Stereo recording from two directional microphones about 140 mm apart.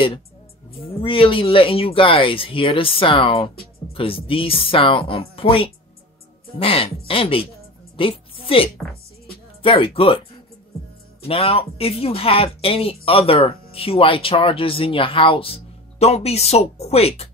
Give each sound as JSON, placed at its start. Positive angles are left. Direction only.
{"t": 1.0, "sound": "speech", "side_deg": 40}
{"t": 7.9, "sound": "a sound", "side_deg": 40}
{"t": 9.6, "sound": "speech", "side_deg": 40}
{"t": 11.2, "sound": "speech", "side_deg": 45}